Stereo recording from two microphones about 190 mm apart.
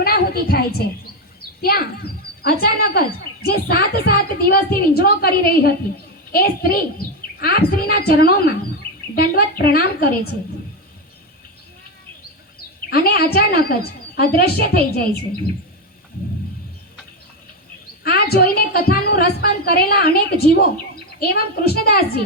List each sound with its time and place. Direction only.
0.0 s a woman's voice: 55° left (ahead or behind)
12.9 s a woman's voice: 55° left (ahead or behind)
18.0 s a woman's voice: 55° left (ahead or behind)